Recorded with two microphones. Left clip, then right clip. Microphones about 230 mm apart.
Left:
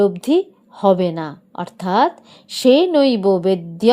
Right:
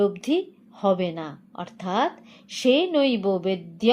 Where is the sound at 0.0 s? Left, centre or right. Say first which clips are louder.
Left 7 dB; left.